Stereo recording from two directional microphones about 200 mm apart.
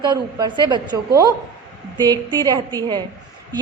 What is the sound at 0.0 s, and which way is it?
A woman's voice, 20° right (ahead or behind).